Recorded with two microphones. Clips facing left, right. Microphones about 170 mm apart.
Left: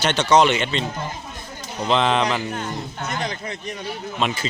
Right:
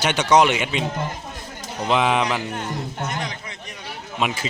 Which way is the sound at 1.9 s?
10° right (ahead or behind).